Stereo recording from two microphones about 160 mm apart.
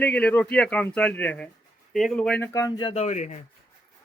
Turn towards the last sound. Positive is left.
turn(degrees=50)  # may be behind; listen again after turning